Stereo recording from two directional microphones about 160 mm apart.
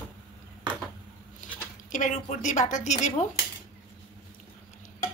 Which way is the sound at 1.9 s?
50° left (ahead or behind).